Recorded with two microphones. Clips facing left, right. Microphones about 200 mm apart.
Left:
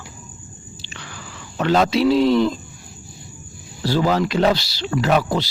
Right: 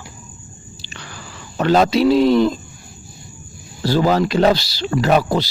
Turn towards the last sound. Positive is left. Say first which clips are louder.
# right 3 dB
turn(degrees=-40)  # may be behind; listen again after turning